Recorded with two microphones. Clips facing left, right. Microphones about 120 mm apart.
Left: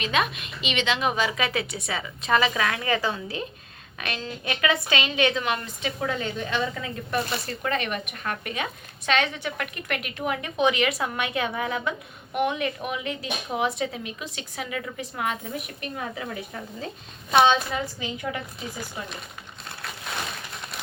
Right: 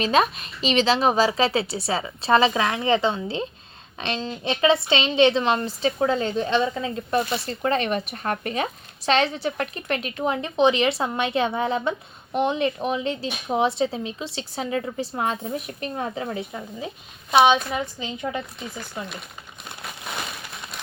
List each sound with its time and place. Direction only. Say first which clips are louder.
0.0 s a woman's voice: right 5 dB; 35° right (ahead or behind)